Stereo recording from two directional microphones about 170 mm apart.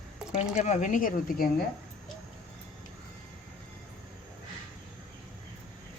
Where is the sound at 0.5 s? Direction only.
45° left (ahead or behind).